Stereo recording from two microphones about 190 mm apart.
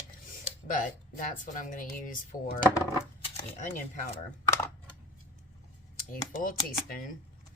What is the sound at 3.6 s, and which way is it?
Speech, 40° left (ahead or behind).